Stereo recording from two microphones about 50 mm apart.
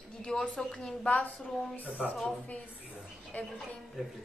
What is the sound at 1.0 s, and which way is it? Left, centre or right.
Speech, left.